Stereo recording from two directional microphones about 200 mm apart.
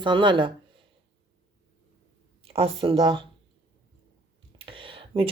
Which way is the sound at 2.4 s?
30° right (ahead or behind).